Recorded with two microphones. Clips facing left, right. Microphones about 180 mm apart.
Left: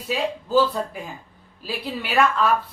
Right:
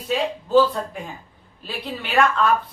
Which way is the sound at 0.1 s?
5° left (ahead or behind).